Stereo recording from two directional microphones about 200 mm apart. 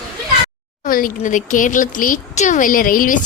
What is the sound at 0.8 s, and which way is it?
Speech, 45° left (ahead or behind).